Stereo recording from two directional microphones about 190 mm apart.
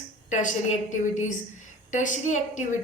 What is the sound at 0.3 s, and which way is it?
A woman's voice, 40° left (ahead or behind).